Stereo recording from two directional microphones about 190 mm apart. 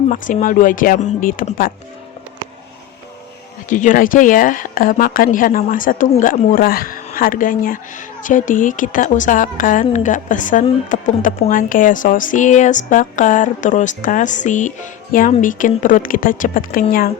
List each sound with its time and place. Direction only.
0.1 s speech: 45° left (ahead or behind)
3.7 s speech: 40° left (ahead or behind)